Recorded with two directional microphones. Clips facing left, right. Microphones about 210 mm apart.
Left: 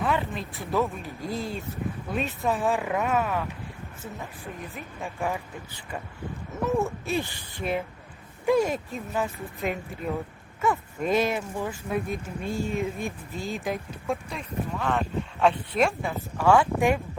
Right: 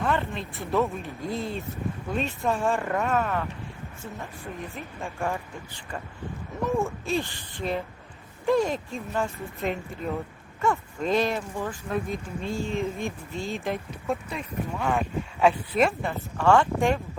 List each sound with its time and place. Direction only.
0.0 s speech: 5° left (ahead or behind)
4.7 s speech: centre (ahead or behind)
6.7 s speech: 5° left (ahead or behind)